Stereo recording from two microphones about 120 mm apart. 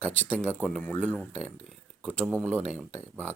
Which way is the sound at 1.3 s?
65° right (ahead or behind).